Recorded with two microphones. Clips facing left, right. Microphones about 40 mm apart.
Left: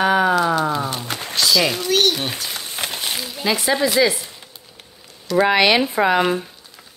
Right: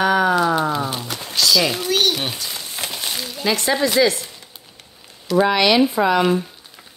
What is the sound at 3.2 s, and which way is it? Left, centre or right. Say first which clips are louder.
Speech: right 1 dB; centre.